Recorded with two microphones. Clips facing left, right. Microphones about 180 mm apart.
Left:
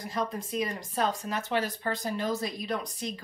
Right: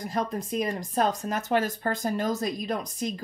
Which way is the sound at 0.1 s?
45° right (ahead or behind).